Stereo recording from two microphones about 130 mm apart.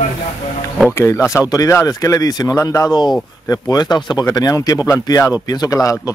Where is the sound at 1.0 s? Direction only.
20° left (ahead or behind).